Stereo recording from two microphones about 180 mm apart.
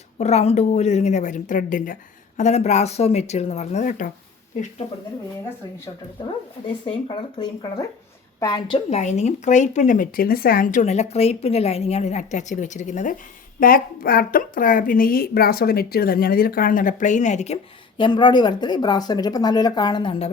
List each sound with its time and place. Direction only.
0.2 s a woman's voice: 35° left (ahead or behind)
7.3 s a woman's voice: 20° left (ahead or behind)